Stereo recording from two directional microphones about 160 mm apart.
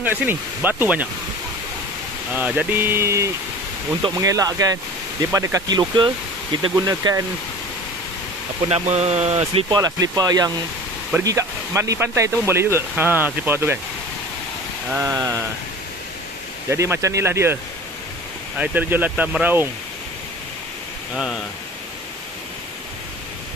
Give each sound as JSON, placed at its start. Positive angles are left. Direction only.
{"t": 0.0, "sound": "speech", "side_deg": -10}
{"t": 2.3, "sound": "speech", "side_deg": -10}
{"t": 8.6, "sound": "speech", "side_deg": -40}
{"t": 9.7, "sound": "speech", "side_deg": -25}
{"t": 14.9, "sound": "speech", "side_deg": -15}
{"t": 16.6, "sound": "speech", "side_deg": -15}
{"t": 18.6, "sound": "speech", "side_deg": -10}
{"t": 21.1, "sound": "speech", "side_deg": -5}